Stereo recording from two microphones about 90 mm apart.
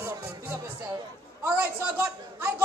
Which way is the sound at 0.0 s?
30° right (ahead or behind).